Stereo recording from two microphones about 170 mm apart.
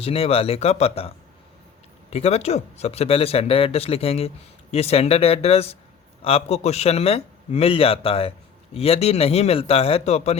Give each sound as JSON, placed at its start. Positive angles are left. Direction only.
{"t": 0.0, "sound": "speech", "side_deg": 35}